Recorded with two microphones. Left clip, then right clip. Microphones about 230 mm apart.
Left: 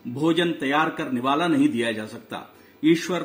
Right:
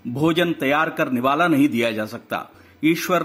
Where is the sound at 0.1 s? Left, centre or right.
Right.